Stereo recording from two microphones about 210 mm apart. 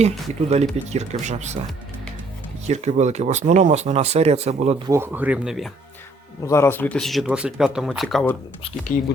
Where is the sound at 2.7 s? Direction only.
35° right (ahead or behind).